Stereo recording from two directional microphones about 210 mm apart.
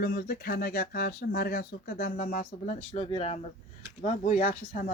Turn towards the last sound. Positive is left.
turn(degrees=40)  # may be behind; listen again after turning